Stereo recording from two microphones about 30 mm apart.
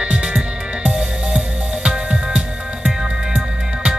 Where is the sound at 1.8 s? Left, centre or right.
Right.